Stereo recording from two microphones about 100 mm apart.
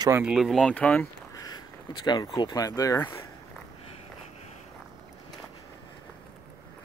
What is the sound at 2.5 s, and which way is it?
Speech, 35° left (ahead or behind).